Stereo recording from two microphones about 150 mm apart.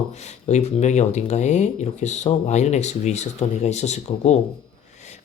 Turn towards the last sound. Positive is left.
turn(degrees=45)  # may be behind; listen again after turning